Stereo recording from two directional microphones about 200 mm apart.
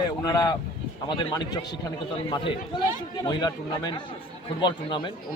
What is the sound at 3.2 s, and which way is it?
Speech, 20° left (ahead or behind).